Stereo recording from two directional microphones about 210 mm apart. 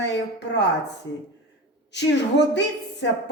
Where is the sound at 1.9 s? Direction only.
55° left (ahead or behind).